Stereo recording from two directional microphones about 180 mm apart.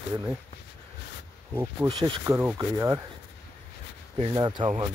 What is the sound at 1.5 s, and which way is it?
Speech, 10° right (ahead or behind).